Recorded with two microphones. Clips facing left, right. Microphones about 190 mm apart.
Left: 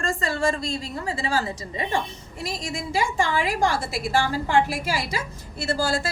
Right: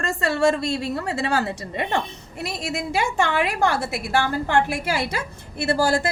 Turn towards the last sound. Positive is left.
turn(degrees=-60)  # may be behind; listen again after turning